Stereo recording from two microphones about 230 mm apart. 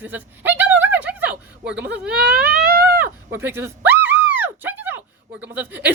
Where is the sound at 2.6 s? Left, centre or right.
Right.